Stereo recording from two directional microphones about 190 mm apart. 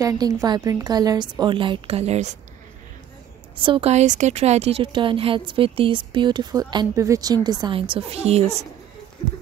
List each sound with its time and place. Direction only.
0.0 s a woman's voice: 20° right (ahead or behind); by 2.3 s 35° right (ahead or behind)
3.5 s a woman's voice: 25° right (ahead or behind)